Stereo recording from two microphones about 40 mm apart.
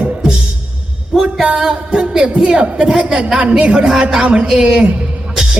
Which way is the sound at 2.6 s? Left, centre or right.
Right.